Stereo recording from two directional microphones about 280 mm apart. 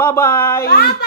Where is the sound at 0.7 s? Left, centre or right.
Left.